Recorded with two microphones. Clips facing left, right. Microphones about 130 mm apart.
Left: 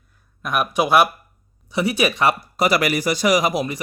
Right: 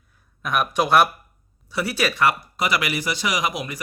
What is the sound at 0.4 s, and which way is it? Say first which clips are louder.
Speech: left 1 dB; 5° left (ahead or behind).